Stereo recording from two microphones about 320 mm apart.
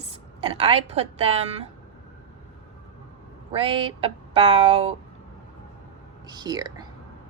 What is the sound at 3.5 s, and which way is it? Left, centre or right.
A woman's voice, centre.